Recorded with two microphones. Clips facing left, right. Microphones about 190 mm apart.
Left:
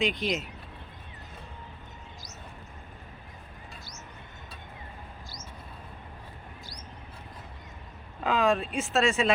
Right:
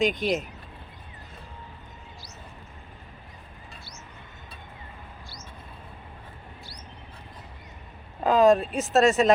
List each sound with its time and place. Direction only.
0.0 s speech: 45° right (ahead or behind)
8.2 s speech: 40° right (ahead or behind)